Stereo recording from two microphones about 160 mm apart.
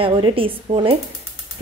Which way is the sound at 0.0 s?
35° right (ahead or behind).